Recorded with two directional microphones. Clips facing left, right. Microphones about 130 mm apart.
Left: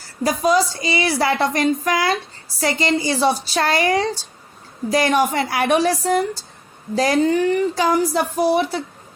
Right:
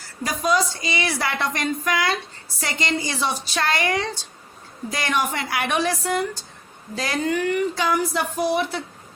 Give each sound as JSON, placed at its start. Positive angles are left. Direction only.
{"t": 0.2, "sound": "speech", "side_deg": 35}